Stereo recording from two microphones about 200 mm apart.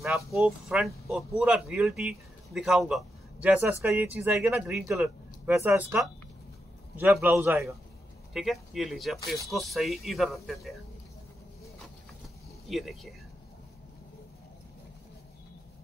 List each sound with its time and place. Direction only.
0.3 s speech: centre (ahead or behind)
3.8 s speech: 10° right (ahead or behind)
7.0 s speech: 10° right (ahead or behind)
12.6 s speech: centre (ahead or behind)